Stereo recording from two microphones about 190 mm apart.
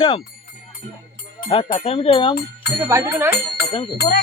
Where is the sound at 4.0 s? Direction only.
60° left (ahead or behind).